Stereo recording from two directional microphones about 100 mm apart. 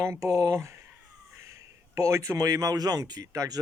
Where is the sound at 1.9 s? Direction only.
30° right (ahead or behind).